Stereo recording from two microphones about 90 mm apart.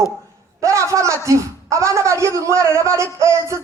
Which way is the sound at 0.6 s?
35° right (ahead or behind).